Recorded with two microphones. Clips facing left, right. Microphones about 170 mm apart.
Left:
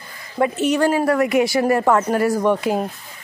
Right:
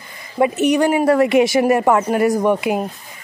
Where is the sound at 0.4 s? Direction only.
15° right (ahead or behind).